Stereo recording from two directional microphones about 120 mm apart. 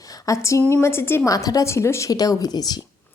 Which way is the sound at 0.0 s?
30° left (ahead or behind).